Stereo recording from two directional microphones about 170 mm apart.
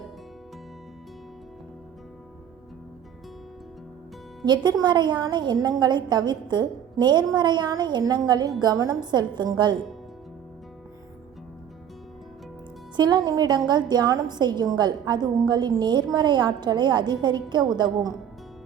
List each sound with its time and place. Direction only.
4.4 s a woman's voice: 25° right (ahead or behind)
13.0 s a woman's voice: 25° right (ahead or behind)